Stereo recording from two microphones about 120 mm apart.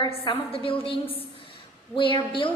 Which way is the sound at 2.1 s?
45° left (ahead or behind).